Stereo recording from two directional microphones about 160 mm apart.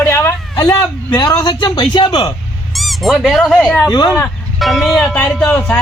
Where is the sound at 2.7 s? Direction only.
Centre (ahead or behind).